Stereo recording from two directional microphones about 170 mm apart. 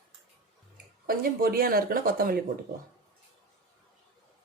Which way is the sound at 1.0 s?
60° right (ahead or behind).